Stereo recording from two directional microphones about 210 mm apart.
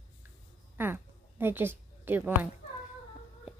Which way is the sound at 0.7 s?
10° right (ahead or behind).